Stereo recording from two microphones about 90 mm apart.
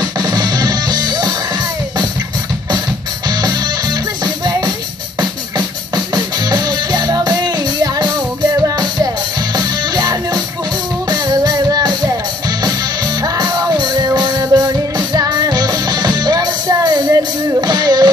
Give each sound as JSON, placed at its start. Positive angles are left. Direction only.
{"t": 0.2, "sound": "music", "side_deg": -50}
{"t": 6.1, "sound": "music", "side_deg": -50}
{"t": 9.6, "sound": "music", "side_deg": -50}
{"t": 13.2, "sound": "music", "side_deg": -50}